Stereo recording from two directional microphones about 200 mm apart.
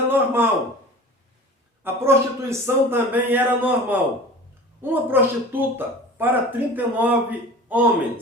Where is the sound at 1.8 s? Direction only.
10° right (ahead or behind).